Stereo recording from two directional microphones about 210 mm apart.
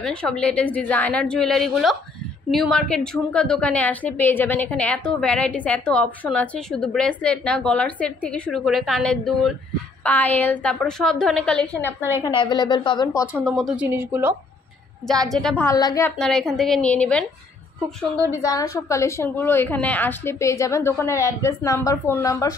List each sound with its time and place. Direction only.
0.0 s a woman's voice: 5° left (ahead or behind)
12.2 s a woman's voice: 20° left (ahead or behind)
13.6 s a woman's voice: 5° right (ahead or behind)
15.2 s a woman's voice: centre (ahead or behind)
16.2 s a woman's voice: 5° left (ahead or behind)
18.4 s a woman's voice: 15° left (ahead or behind)